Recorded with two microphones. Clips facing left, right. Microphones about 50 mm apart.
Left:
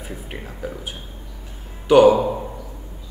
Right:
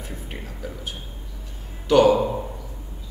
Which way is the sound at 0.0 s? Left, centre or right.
Centre.